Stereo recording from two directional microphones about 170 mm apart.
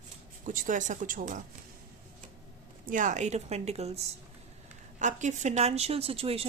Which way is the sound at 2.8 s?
50° right (ahead or behind).